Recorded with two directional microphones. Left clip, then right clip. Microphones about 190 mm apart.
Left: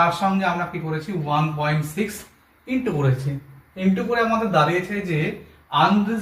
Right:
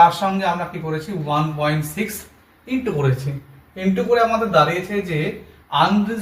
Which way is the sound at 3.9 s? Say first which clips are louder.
Right 5 dB; 15° left (ahead or behind).